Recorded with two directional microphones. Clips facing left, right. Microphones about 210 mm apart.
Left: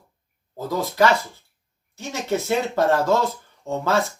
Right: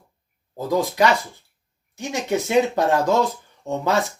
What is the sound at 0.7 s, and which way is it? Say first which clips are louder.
Speech: right 1 dB; 15° right (ahead or behind).